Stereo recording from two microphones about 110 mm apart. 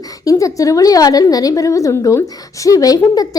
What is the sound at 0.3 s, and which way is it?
A woman's voice, 30° left (ahead or behind).